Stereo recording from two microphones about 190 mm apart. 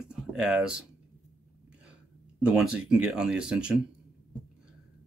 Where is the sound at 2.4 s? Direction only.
5° right (ahead or behind).